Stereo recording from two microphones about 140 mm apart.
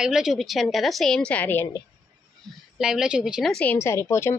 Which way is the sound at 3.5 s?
10° left (ahead or behind).